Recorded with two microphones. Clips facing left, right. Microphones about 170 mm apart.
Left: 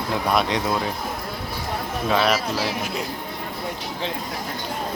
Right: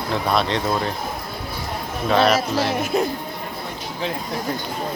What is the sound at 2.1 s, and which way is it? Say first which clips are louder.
Speech: right 4 dB; 5° left (ahead or behind).